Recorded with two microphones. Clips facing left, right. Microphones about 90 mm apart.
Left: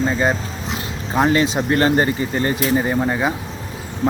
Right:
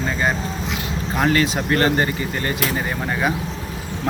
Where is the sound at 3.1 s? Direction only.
15° left (ahead or behind).